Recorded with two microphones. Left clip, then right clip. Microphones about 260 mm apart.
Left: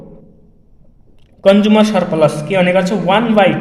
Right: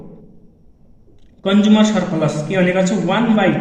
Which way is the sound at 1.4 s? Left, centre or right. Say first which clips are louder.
Left 6 dB; left.